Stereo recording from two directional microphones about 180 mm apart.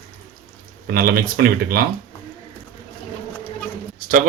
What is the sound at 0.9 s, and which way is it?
Speech, 55° right (ahead or behind).